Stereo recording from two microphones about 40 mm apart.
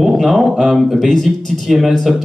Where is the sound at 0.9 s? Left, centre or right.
Centre.